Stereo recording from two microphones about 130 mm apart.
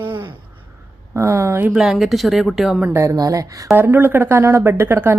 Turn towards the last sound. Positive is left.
turn(degrees=-20)  # may be behind; listen again after turning